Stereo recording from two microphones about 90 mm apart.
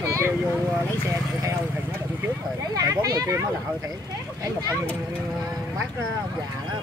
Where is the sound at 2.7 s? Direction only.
45° right (ahead or behind).